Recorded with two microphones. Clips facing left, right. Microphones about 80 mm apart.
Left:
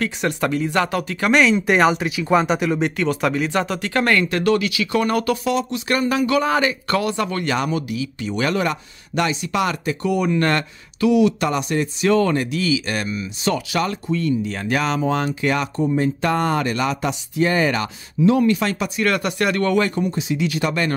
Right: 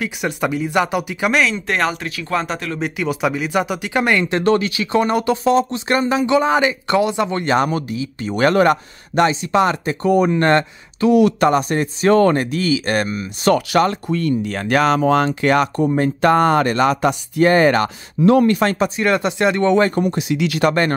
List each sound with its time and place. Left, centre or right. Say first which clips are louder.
0.0 s speech: even; centre
1.3 s speech: left 5 dB; centre
2.8 s speech: even; centre; by 11.1 s right
11.1 s speech: right 7 dB; right
18.9 s speech: right 3 dB; right
20.0 s speech: right 3 dB; right